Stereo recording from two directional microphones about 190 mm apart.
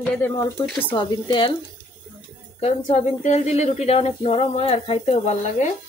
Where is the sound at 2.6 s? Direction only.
35° left (ahead or behind).